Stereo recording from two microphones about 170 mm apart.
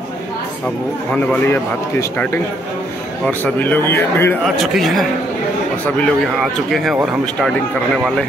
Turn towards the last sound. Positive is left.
turn(degrees=0)  # may be behind; listen again after turning